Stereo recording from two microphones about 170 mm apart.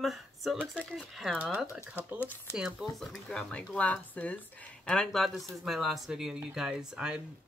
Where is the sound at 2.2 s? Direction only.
15° left (ahead or behind).